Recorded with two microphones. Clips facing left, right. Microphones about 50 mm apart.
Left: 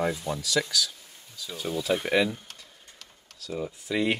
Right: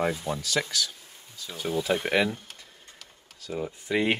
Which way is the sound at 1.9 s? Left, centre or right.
Right.